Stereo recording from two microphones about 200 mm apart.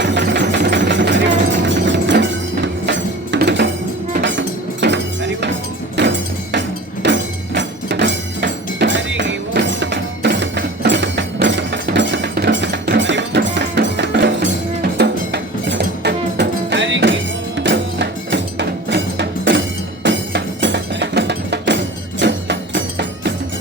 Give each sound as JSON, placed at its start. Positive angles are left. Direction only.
{"t": 0.0, "sound": "engine", "side_deg": -60}
{"t": 0.5, "sound": "a sound", "side_deg": -60}
{"t": 1.6, "sound": "music", "side_deg": -65}